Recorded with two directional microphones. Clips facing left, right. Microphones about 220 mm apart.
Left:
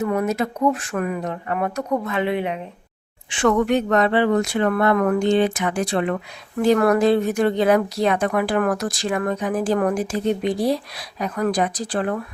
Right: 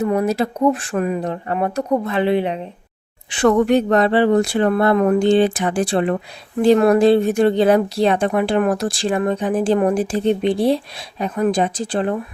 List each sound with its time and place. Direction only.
0.0 s speech: 30° right (ahead or behind)